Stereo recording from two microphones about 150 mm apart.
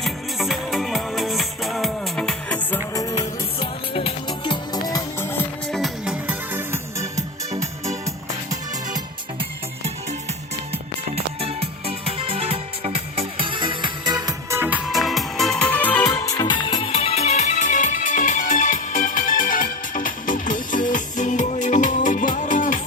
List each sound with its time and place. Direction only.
0.0 s music: centre (ahead or behind)
2.9 s music: 25° left (ahead or behind)
3.6 s music: 40° left (ahead or behind); by 5.4 s 20° left (ahead or behind)
5.7 s music: 5° right (ahead or behind); by 7.3 s 20° right (ahead or behind)
11.1 s music: 40° right (ahead or behind)
14.6 s music: 10° right (ahead or behind)
14.8 s music: centre (ahead or behind)
16.0 s music: 20° left (ahead or behind); by 22.8 s 60° left (ahead or behind)